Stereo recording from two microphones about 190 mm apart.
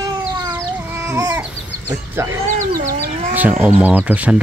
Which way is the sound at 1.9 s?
15° right (ahead or behind).